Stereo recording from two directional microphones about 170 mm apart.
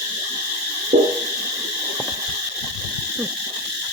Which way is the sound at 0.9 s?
40° right (ahead or behind).